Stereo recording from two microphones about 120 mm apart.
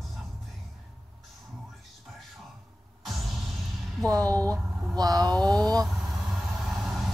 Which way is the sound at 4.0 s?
30° right (ahead or behind).